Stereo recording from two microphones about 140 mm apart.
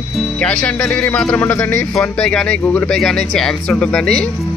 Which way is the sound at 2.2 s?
5° left (ahead or behind).